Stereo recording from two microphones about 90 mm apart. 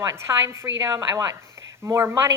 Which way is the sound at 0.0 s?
35° right (ahead or behind).